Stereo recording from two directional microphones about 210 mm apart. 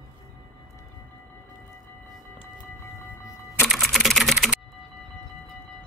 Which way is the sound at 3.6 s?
Centre (ahead or behind).